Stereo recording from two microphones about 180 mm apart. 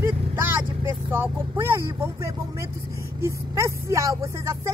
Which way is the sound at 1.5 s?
15° right (ahead or behind).